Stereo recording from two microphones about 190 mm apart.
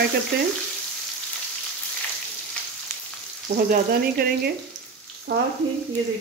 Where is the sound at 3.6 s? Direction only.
55° right (ahead or behind).